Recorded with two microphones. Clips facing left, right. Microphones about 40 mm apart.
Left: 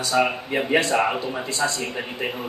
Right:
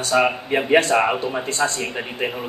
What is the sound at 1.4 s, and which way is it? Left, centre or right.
Speech, right.